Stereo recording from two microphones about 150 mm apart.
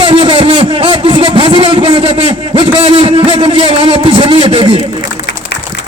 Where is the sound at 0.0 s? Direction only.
35° right (ahead or behind).